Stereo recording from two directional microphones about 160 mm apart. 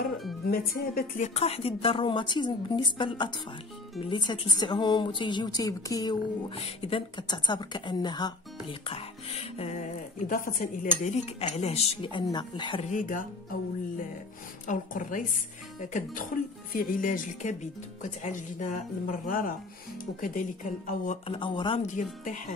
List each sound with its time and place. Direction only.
0.5 s a woman's voice: 70° left (ahead or behind)
1.3 s a woman's voice: 40° left (ahead or behind); by 6.1 s 20° left (ahead or behind)
6.5 s speech: 35° left (ahead or behind); by 10.9 s 60° left (ahead or behind)
11.0 s speech: 45° left (ahead or behind); by 12.8 s 30° left (ahead or behind)
12.9 s a woman's voice: 55° left (ahead or behind)
16.7 s a woman's voice: 55° left (ahead or behind)
21.3 s speech: 30° left (ahead or behind)
21.8 s a woman's voice: 55° left (ahead or behind)